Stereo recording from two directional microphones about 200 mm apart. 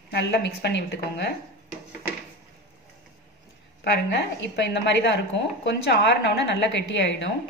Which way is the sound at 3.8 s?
60° left (ahead or behind).